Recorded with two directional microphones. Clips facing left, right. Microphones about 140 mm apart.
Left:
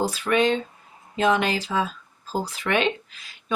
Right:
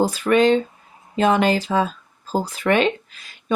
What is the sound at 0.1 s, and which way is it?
Speech, 40° right (ahead or behind).